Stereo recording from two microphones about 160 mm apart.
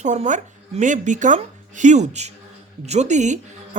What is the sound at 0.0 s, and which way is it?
A woman's voice, 50° right (ahead or behind).